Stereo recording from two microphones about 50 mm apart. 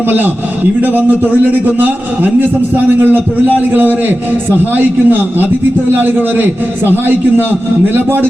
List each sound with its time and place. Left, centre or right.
0.8 s a man's voice: right